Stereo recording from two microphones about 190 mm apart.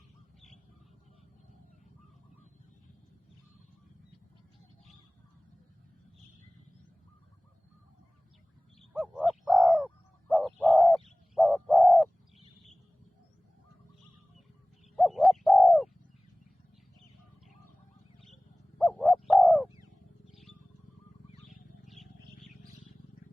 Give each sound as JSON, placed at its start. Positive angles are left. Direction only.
{"t": 8.8, "sound": "a sound", "side_deg": -5}
{"t": 9.1, "sound": "bird", "side_deg": 0}
{"t": 14.9, "sound": "bird", "side_deg": 0}
{"t": 18.8, "sound": "bird", "side_deg": 0}
{"t": 19.6, "sound": "bird", "side_deg": -15}
{"t": 21.8, "sound": "wild animals", "side_deg": 0}